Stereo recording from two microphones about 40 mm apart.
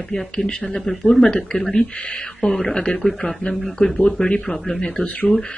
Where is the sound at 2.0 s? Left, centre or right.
Left.